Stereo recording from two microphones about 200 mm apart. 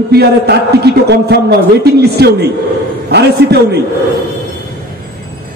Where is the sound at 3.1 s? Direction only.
55° right (ahead or behind).